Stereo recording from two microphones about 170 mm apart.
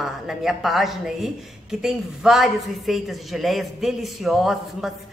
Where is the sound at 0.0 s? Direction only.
Centre (ahead or behind).